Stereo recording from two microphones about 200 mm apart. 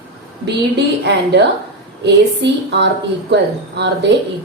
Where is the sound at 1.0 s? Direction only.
60° right (ahead or behind).